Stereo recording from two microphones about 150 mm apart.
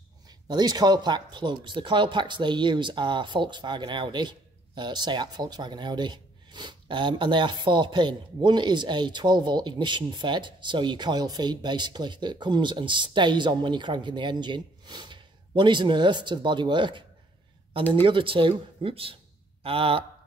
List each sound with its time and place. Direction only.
0.3 s speech: 30° right (ahead or behind)
18.0 s speech: 35° right (ahead or behind)